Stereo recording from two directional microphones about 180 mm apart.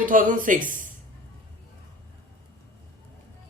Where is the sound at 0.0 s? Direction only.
50° right (ahead or behind).